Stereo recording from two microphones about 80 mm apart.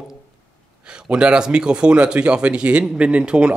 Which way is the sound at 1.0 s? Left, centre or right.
Centre.